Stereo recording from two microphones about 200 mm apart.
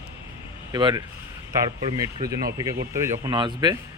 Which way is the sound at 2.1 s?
20° right (ahead or behind).